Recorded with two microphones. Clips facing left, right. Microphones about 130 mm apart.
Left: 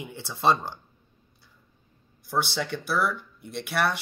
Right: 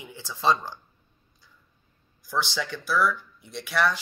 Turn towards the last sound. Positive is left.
turn(degrees=60)  # may be behind; listen again after turning